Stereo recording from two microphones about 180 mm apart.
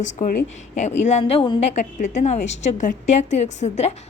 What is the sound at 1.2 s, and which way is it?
A woman's voice, 25° left (ahead or behind).